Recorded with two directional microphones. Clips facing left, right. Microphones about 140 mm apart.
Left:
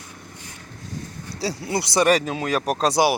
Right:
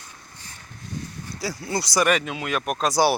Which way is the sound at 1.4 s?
25° left (ahead or behind).